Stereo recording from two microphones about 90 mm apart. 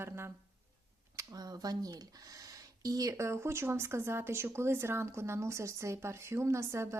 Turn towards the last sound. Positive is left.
turn(degrees=-30)  # may be behind; listen again after turning